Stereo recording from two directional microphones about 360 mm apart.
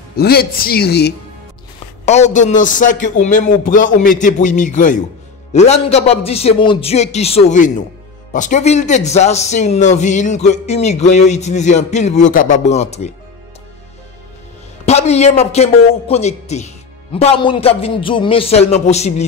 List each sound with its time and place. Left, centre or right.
0.1 s a man's voice: left
14.9 s a man's voice: centre